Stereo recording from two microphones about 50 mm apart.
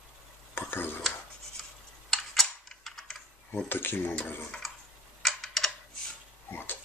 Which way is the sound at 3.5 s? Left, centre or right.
Left.